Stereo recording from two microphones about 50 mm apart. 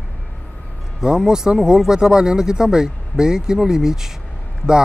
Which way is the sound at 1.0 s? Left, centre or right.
Centre.